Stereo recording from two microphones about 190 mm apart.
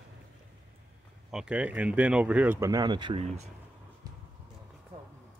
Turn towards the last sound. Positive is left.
turn(degrees=-25)  # may be behind; listen again after turning